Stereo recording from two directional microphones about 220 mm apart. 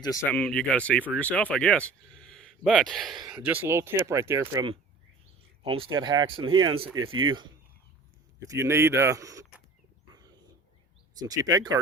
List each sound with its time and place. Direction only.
0.0 s speech: 15° left (ahead or behind); by 6.9 s 20° right (ahead or behind)
6.9 s speech: 70° right (ahead or behind)
7.2 s speech: 20° right (ahead or behind)
8.4 s speech: 15° right (ahead or behind)
11.2 s speech: 15° right (ahead or behind)